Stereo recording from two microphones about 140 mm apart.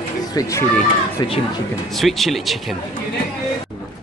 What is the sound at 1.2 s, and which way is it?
Speech, 35° left (ahead or behind).